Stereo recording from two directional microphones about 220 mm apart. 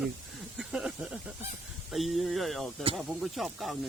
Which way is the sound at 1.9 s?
Centre (ahead or behind).